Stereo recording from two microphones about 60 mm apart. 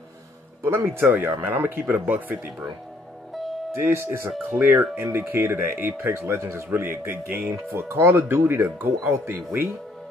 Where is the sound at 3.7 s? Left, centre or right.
Right.